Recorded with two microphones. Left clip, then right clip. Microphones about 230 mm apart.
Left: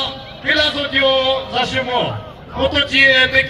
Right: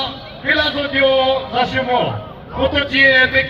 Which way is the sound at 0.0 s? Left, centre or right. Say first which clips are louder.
Left 1 dB; left.